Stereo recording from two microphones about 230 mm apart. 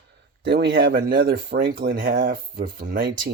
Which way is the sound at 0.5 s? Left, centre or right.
Right.